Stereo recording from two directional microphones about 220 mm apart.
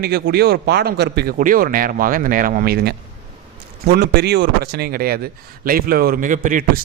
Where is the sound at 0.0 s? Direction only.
50° right (ahead or behind).